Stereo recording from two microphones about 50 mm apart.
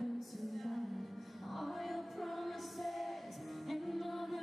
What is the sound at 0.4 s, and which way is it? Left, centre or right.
Music, centre.